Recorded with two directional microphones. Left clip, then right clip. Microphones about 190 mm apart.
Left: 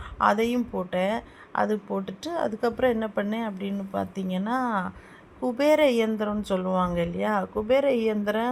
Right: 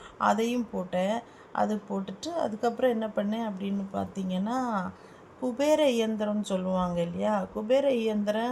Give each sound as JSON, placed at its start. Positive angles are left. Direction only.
{"t": 0.2, "sound": "a woman's voice", "side_deg": 20}